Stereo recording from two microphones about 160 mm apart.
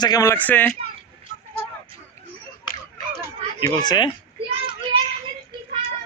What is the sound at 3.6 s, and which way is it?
Speech, 25° left (ahead or behind).